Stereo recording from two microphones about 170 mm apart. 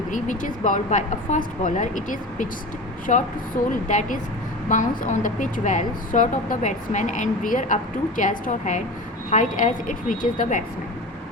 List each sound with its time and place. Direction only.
0.1 s a woman's voice: 50° left (ahead or behind)